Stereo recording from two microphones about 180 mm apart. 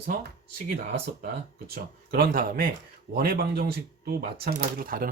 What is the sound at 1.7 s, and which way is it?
Speech, 55° right (ahead or behind).